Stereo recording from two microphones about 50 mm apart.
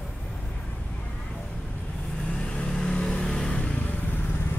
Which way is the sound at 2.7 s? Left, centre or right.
Centre.